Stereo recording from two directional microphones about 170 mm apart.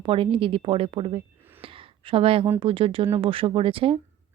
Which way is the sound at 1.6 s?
30° right (ahead or behind).